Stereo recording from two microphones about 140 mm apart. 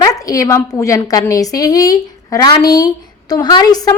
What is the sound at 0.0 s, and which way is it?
A woman's voice, 25° left (ahead or behind).